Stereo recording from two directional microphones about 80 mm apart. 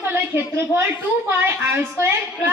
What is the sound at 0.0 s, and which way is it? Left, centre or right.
A woman's voice, right.